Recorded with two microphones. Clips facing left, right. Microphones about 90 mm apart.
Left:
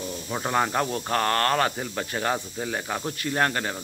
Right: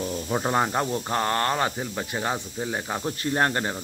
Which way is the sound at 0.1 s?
25° right (ahead or behind).